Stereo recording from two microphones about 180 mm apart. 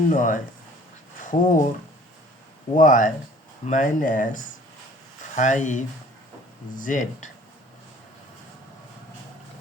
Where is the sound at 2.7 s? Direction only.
45° left (ahead or behind).